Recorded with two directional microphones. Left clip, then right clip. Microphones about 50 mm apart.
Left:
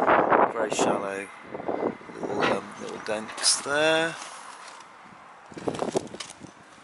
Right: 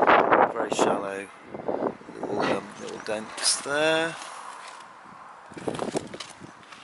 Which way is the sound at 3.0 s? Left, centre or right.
Centre.